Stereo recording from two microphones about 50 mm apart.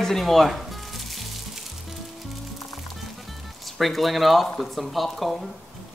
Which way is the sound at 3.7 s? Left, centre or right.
Centre.